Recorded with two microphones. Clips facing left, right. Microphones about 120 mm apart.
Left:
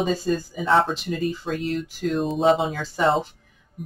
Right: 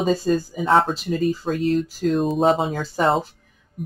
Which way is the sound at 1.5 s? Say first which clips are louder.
Right 5 dB; centre (ahead or behind).